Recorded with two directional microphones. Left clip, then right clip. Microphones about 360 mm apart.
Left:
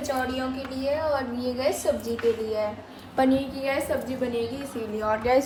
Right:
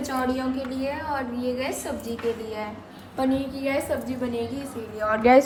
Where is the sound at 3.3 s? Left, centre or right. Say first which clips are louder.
Even; centre.